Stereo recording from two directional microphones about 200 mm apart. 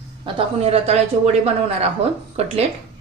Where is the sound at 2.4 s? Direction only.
30° right (ahead or behind).